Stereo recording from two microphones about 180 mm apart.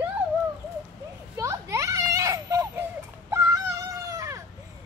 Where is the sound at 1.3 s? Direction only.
15° right (ahead or behind).